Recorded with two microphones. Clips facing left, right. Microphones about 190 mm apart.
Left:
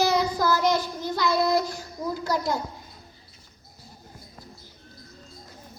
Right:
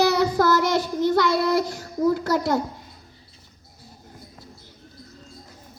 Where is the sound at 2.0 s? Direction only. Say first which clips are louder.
Right 6 dB; 80° right.